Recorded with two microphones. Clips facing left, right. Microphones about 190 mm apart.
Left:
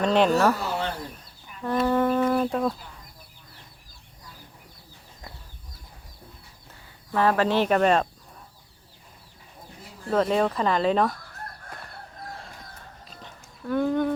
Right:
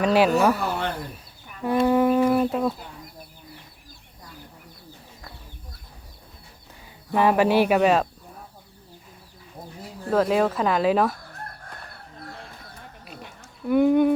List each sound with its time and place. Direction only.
0.0 s speech: 5° right (ahead or behind)
0.6 s bird: 55° right (ahead or behind)
1.6 s speech: 10° right (ahead or behind)
7.1 s speech: 15° right (ahead or behind)
10.1 s speech: 5° right (ahead or behind)
13.2 s a sound: 15° right (ahead or behind)